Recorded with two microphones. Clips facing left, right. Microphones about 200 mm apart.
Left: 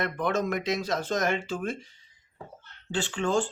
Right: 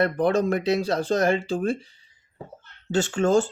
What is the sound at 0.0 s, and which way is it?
Speech, 35° right (ahead or behind).